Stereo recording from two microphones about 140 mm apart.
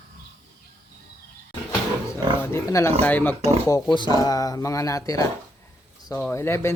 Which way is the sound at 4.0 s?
25° left (ahead or behind).